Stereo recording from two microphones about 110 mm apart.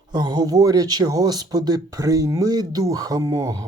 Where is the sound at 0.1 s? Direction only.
35° right (ahead or behind).